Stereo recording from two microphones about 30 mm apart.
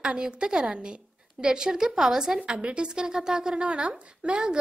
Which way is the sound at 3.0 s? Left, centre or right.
Right.